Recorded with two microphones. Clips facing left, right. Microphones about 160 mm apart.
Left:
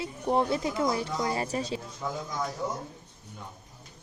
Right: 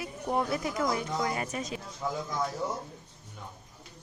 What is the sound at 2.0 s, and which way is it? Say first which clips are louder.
Speech: right 2 dB; centre (ahead or behind).